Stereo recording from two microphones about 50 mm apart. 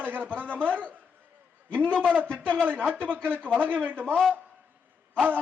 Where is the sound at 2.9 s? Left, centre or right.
Right.